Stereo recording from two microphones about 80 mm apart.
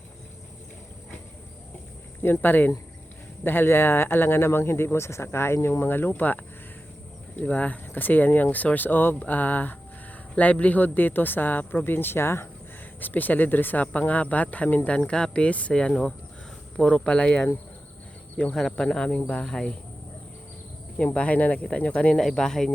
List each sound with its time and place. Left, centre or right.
2.2 s speech: left
7.4 s speech: centre
18.5 s speech: centre
21.0 s speech: centre